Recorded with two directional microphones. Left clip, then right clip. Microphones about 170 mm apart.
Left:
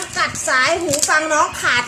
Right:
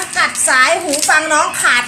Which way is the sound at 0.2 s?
25° left (ahead or behind).